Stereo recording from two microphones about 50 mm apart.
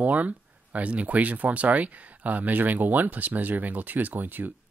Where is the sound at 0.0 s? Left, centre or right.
Right.